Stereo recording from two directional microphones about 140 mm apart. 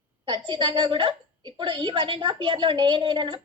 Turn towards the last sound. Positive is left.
turn(degrees=-35)  # may be behind; listen again after turning